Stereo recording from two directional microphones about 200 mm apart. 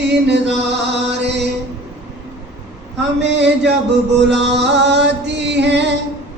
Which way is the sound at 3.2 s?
60° right (ahead or behind).